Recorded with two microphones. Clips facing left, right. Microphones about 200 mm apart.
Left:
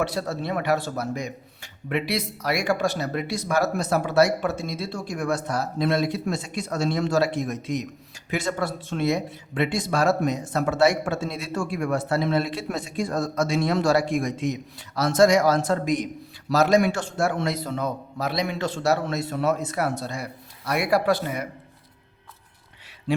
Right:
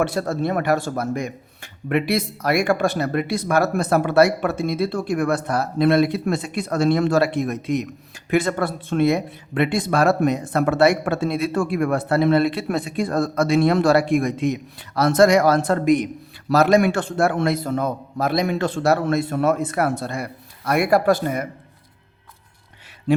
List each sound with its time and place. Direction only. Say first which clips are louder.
0.0 s speech: right 5 dB; 50° right (ahead or behind)